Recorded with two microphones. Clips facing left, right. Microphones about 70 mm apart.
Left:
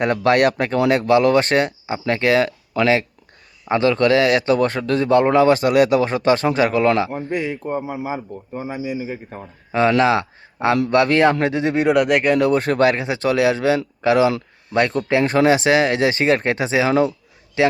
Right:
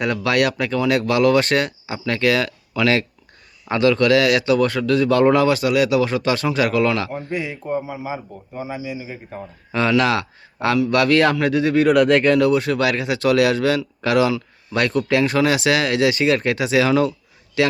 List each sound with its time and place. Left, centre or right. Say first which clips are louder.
0.0 s a man's voice: left 3 dB; left
7.3 s speech: left 2 dB; left
10.0 s a man's voice: left 3 dB; left
12.5 s a man's voice: left 2 dB; left